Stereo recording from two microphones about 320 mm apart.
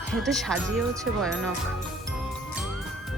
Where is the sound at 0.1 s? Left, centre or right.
Centre.